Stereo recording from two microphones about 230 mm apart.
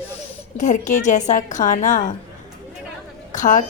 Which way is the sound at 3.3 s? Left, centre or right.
Left.